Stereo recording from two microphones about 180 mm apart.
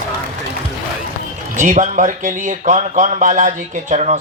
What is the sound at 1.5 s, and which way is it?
Speech, 45° right (ahead or behind).